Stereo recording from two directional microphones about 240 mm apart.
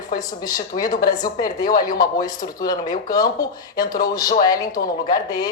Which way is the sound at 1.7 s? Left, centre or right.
Left.